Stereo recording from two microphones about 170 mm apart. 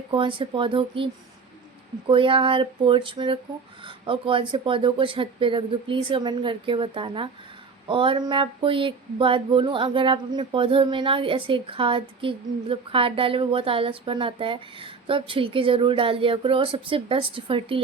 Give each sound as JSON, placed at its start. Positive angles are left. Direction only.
{"t": 0.1, "sound": "speech", "side_deg": -30}